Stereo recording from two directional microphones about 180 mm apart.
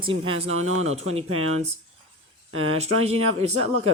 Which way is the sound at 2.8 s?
35° right (ahead or behind).